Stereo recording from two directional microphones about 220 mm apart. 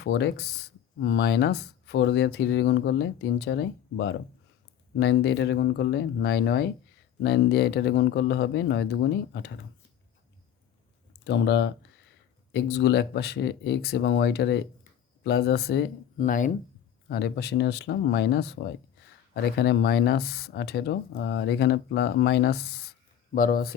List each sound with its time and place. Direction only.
0.0 s speech: 50° left (ahead or behind)
11.3 s speech: 50° left (ahead or behind)
16.1 s speech: 35° left (ahead or behind)
17.1 s speech: 50° left (ahead or behind)